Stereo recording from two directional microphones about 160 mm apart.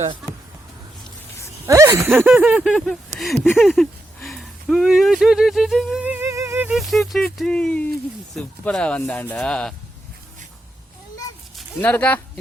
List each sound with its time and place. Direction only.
1.6 s a sound: 20° right (ahead or behind)
2.5 s speech: 5° right (ahead or behind)
6.7 s speech: centre (ahead or behind)
11.5 s speech: 10° left (ahead or behind)